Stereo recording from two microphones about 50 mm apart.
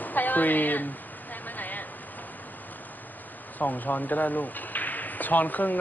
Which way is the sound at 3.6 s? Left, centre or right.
Left.